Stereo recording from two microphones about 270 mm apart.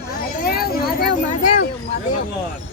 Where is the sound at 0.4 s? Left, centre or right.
Left.